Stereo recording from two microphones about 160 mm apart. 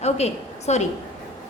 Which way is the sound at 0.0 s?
40° left (ahead or behind).